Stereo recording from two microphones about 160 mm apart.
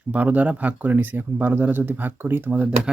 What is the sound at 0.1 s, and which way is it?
Speech, 10° right (ahead or behind).